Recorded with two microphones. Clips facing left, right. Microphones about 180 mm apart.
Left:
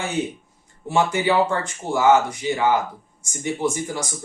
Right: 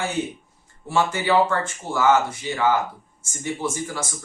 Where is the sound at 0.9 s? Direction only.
20° left (ahead or behind).